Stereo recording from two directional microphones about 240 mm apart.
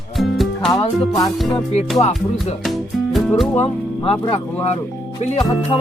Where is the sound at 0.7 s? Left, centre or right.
Centre.